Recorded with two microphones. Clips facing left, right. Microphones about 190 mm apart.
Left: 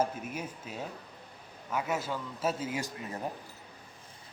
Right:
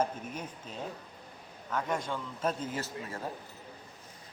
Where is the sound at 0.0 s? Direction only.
10° left (ahead or behind).